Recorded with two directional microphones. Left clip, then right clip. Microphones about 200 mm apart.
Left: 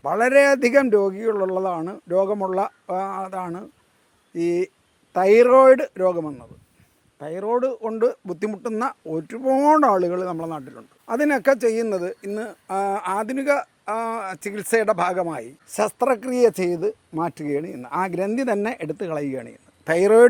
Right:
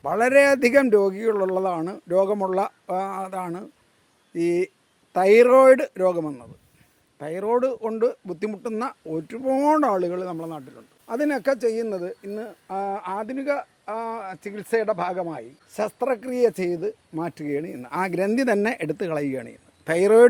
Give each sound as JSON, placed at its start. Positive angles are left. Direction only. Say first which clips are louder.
{"t": 0.0, "sound": "speech", "louder": "left 1 dB", "side_deg": 10}
{"t": 18.1, "sound": "speech", "louder": "right 1 dB", "side_deg": 0}